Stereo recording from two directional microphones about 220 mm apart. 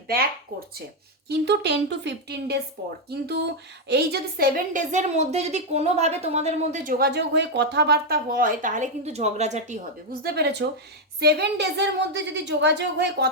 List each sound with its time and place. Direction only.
1.3 s a woman's voice: 50° right (ahead or behind)